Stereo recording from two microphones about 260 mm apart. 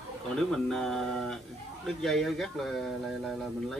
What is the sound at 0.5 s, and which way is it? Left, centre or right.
Speech, centre.